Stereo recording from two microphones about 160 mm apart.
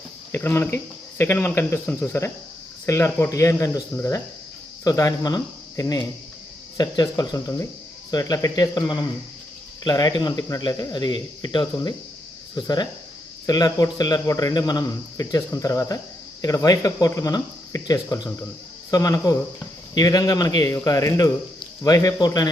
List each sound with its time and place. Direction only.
0.3 s speech: 15° left (ahead or behind)